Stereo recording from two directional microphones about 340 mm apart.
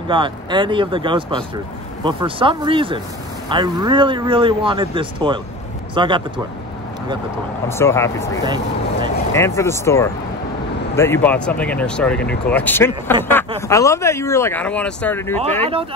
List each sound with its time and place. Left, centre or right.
0.1 s speech: centre
7.6 s speech: centre
15.3 s speech: centre